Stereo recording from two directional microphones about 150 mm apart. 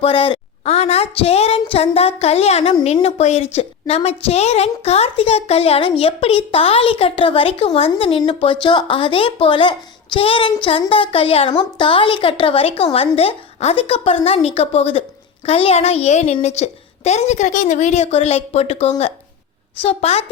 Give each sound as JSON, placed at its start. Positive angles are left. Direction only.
{"t": 0.0, "sound": "a child's voice", "side_deg": 35}